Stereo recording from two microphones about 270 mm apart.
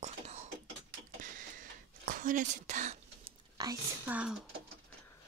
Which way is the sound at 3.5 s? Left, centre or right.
Centre.